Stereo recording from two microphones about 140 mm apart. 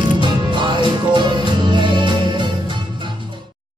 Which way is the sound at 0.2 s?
35° right (ahead or behind).